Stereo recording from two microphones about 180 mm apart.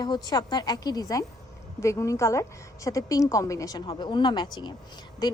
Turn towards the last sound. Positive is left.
turn(degrees=20)  # may be behind; listen again after turning